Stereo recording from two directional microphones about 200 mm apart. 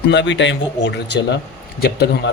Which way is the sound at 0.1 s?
65° left (ahead or behind).